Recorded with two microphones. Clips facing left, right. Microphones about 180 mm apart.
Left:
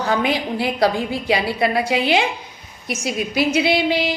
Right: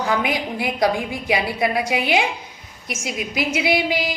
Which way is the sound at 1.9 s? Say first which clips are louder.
Left 2 dB; 25° left (ahead or behind).